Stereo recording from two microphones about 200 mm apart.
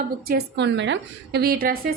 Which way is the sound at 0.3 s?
55° right (ahead or behind).